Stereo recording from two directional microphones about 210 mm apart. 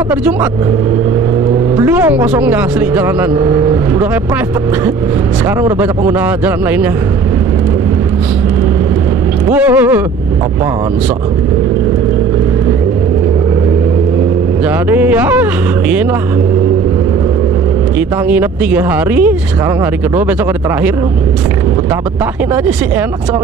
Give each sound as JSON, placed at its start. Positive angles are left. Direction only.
{"t": 1.8, "sound": "speech", "side_deg": -10}
{"t": 5.6, "sound": "speech", "side_deg": -10}
{"t": 9.5, "sound": "speech", "side_deg": -5}
{"t": 14.9, "sound": "speech", "side_deg": -10}
{"t": 18.3, "sound": "speech", "side_deg": -10}